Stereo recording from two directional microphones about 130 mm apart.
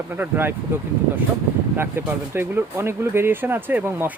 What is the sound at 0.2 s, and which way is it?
Speech, 15° right (ahead or behind).